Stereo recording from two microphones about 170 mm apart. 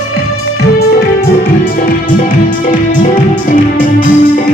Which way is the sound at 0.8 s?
60° left (ahead or behind).